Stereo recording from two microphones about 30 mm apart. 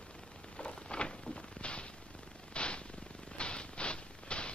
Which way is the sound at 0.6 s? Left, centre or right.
Left.